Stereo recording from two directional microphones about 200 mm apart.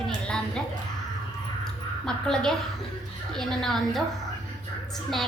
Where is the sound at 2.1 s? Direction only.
5° left (ahead or behind).